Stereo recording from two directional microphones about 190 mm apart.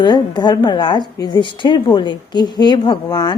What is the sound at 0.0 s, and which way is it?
A woman's voice, 20° left (ahead or behind).